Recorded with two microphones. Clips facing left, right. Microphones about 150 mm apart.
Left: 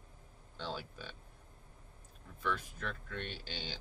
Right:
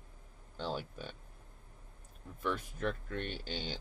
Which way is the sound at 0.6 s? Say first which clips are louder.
Right 4 dB; 45° right (ahead or behind).